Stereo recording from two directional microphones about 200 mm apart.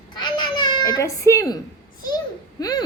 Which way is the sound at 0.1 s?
20° left (ahead or behind).